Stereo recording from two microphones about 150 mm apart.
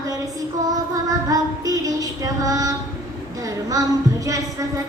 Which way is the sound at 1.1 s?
25° right (ahead or behind).